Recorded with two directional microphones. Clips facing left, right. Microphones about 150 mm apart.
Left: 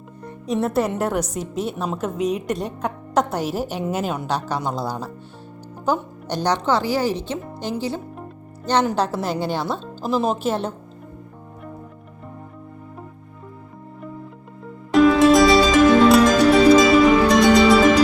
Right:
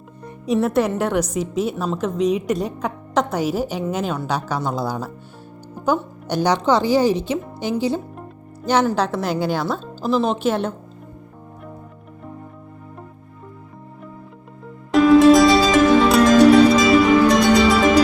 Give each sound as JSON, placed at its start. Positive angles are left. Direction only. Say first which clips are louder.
{"t": 0.3, "sound": "a woman's voice", "louder": "right 3 dB", "side_deg": -5}
{"t": 6.7, "sound": "a woman's voice", "louder": "right 6 dB", "side_deg": -20}
{"t": 7.4, "sound": "a woman's voice", "louder": "right 4 dB", "side_deg": -5}
{"t": 14.9, "sound": "music", "louder": "right 2 dB", "side_deg": 0}